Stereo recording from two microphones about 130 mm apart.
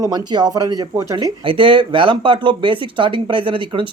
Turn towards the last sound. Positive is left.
turn(degrees=-40)  # may be behind; listen again after turning